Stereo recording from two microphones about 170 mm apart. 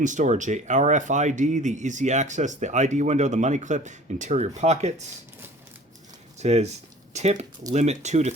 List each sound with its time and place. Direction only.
0.0 s speech: 45° right (ahead or behind)
6.4 s speech: 40° right (ahead or behind)